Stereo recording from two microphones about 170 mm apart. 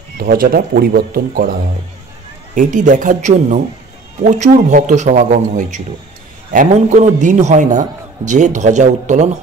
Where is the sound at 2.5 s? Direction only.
50° right (ahead or behind).